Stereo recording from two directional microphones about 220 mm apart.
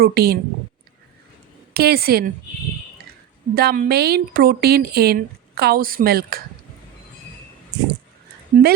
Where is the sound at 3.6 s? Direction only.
40° right (ahead or behind).